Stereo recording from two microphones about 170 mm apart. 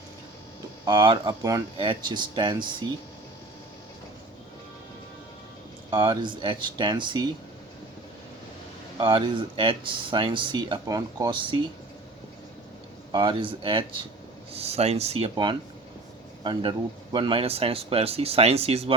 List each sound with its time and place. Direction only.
0.9 s speech: 25° right (ahead or behind)
5.9 s speech: 20° right (ahead or behind)
9.0 s speech: 25° right (ahead or behind)
13.1 s speech: 30° right (ahead or behind)